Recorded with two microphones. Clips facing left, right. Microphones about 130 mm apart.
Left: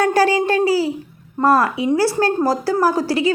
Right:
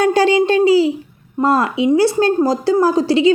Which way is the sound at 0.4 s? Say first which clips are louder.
Right 5 dB; 20° right (ahead or behind).